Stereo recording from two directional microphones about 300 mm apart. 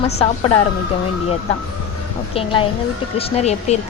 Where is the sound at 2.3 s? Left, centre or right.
Centre.